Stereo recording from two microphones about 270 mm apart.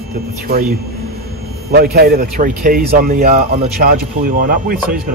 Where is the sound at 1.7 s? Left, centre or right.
Right.